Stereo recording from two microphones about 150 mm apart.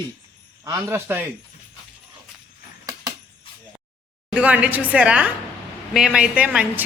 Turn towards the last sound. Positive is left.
turn(degrees=-10)  # may be behind; listen again after turning